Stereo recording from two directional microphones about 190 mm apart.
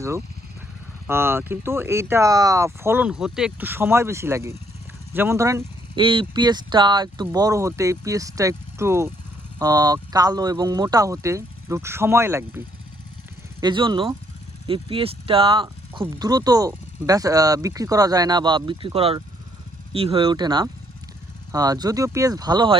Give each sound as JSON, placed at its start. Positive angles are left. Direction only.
{"t": 1.0, "sound": "speech", "side_deg": -10}
{"t": 13.6, "sound": "speech", "side_deg": -25}